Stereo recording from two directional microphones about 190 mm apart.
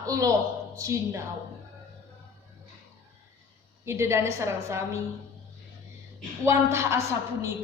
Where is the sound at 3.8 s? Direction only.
15° right (ahead or behind).